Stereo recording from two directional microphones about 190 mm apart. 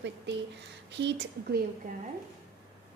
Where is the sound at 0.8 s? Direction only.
70° right (ahead or behind).